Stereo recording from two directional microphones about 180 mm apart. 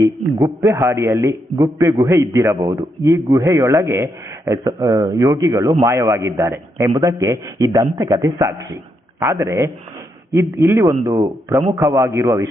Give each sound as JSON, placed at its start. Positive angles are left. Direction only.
{"t": 0.0, "sound": "a man's voice", "side_deg": -15}